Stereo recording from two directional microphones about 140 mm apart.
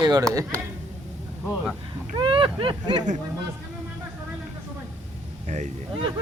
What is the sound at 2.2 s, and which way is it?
Speech, 40° right (ahead or behind).